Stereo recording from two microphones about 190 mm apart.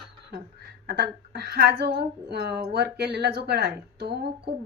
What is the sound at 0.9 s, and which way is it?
A woman's voice, 60° right (ahead or behind).